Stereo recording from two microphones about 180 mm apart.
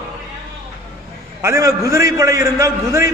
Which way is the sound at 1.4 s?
15° right (ahead or behind).